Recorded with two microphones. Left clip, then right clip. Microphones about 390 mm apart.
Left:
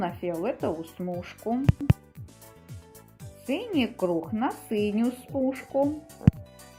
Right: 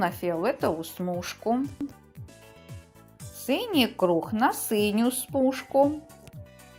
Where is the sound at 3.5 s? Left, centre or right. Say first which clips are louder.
Right 3 dB; centre.